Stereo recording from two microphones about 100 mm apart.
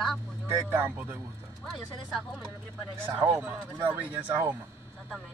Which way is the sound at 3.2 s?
15° right (ahead or behind).